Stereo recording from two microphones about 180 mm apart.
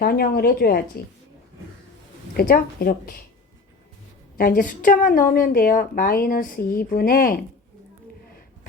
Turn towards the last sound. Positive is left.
turn(degrees=55)  # may be behind; listen again after turning